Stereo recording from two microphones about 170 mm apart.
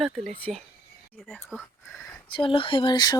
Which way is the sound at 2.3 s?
30° left (ahead or behind).